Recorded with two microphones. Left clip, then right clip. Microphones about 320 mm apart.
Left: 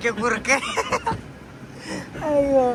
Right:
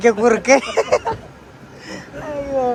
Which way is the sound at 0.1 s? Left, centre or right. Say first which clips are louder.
Right 6 dB; right.